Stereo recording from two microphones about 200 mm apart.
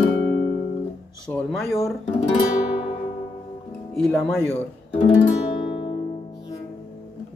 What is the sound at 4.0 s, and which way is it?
Speech, centre (ahead or behind).